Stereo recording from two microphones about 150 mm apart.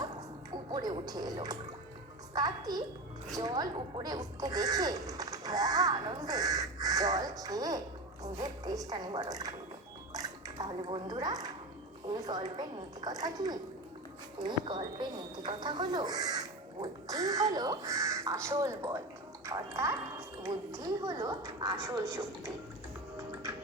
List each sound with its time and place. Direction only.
0.7 s speech: 25° right (ahead or behind)
10.1 s a sound: 25° right (ahead or behind)
12.1 s speech: 25° right (ahead or behind)